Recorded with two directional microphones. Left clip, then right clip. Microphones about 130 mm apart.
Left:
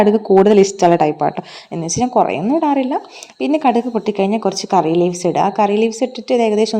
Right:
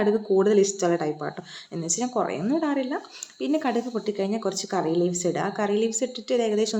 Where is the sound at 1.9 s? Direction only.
40° left (ahead or behind).